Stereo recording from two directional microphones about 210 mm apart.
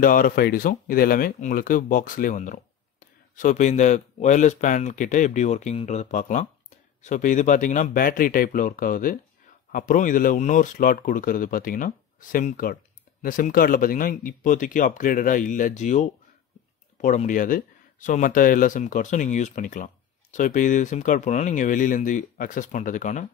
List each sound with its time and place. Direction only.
0.0 s speech: 40° left (ahead or behind)